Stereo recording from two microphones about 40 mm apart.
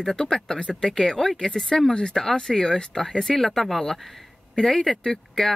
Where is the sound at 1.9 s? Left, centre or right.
Left.